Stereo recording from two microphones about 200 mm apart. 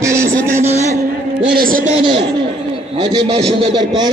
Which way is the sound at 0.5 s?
35° right (ahead or behind).